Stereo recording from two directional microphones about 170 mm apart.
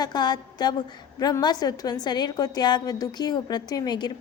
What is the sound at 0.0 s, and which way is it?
A woman's voice, 25° left (ahead or behind).